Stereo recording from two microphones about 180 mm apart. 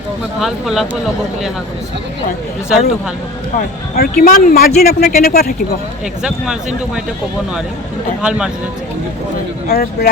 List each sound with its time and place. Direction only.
0.3 s speech: centre (ahead or behind)
3.6 s speech: 50° left (ahead or behind)
6.2 s speech: 5° right (ahead or behind)
8.2 s speech: 5° right (ahead or behind)
9.6 s speech: 55° left (ahead or behind)